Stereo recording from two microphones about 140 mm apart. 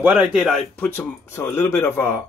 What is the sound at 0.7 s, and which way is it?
Speech, 15° left (ahead or behind).